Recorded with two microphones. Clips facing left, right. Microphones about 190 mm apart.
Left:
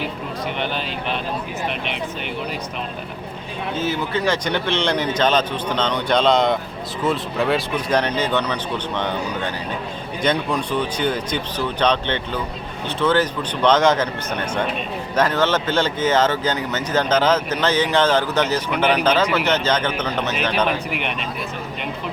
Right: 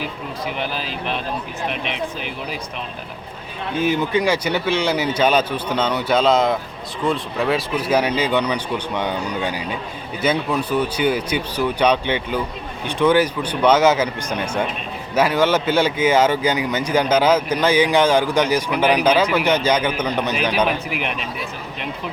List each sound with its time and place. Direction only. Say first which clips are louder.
0.0 s speech: left 1 dB; 5° right (ahead or behind)
3.8 s speech: right 5 dB; 15° right (ahead or behind)